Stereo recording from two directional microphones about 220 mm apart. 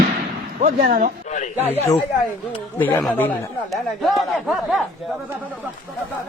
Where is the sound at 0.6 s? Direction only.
30° right (ahead or behind).